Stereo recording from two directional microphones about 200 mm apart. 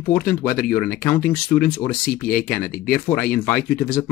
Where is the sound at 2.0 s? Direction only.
50° left (ahead or behind).